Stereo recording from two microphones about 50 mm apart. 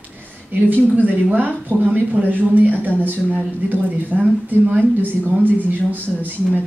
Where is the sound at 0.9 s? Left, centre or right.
Right.